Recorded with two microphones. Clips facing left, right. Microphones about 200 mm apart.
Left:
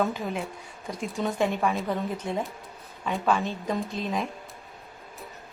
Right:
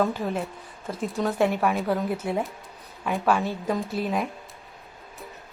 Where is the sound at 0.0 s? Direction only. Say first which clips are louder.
Right 2 dB; centre (ahead or behind).